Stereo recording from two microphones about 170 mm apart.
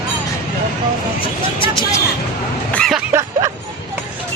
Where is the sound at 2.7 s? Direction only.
5° left (ahead or behind).